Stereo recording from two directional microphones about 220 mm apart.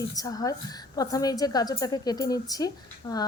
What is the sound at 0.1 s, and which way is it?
A woman's voice, 15° left (ahead or behind).